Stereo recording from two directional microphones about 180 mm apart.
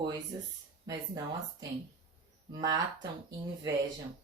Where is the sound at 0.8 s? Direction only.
20° right (ahead or behind).